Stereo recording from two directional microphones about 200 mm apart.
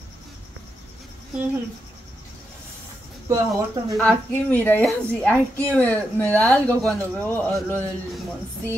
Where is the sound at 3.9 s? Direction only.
5° left (ahead or behind).